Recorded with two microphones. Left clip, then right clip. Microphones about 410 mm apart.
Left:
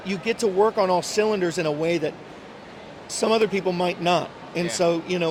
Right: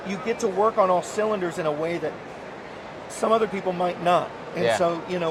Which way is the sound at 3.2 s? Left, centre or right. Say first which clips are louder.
Left 1 dB; left.